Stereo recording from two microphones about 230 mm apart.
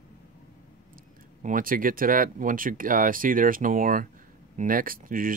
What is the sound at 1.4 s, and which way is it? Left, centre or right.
Speech, right.